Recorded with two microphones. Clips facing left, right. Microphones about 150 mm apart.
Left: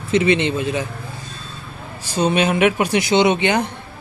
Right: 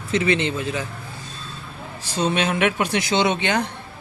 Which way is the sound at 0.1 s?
20° left (ahead or behind).